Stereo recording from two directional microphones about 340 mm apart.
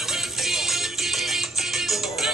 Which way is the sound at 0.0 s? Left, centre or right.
Centre.